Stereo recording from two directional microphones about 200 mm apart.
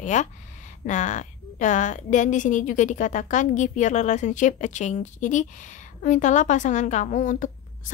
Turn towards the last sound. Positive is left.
turn(degrees=40)  # may be behind; listen again after turning